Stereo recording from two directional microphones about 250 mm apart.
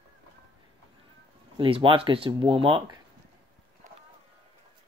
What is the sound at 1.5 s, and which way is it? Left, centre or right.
Speech, right.